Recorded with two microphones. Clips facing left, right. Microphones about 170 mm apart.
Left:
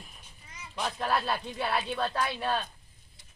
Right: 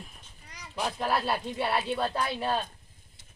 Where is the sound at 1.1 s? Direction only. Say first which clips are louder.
Right 1 dB; 30° right (ahead or behind).